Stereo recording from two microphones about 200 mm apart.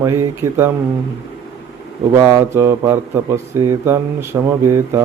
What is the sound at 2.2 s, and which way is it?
Speech, 15° right (ahead or behind).